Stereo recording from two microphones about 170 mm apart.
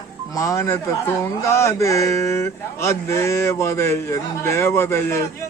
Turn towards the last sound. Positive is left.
turn(degrees=15)  # may be behind; listen again after turning